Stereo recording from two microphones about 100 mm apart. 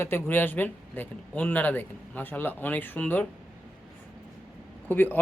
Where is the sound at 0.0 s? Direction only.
20° left (ahead or behind).